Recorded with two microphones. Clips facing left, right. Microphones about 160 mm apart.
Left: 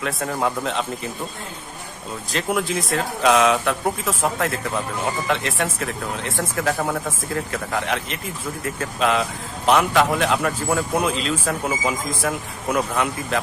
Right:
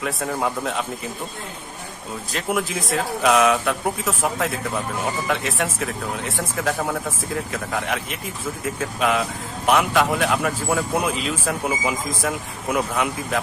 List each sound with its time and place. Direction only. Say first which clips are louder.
0.0 s speech: left 1 dB; 5° right (ahead or behind)
2.3 s speech: left 2 dB; 5° right (ahead or behind)